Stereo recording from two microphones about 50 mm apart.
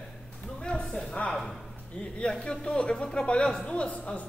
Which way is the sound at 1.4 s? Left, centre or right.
Centre.